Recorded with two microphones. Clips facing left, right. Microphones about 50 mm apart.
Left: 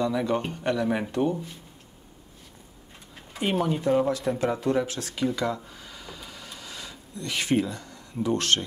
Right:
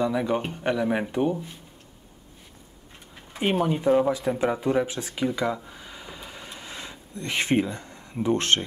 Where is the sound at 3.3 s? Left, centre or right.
Centre.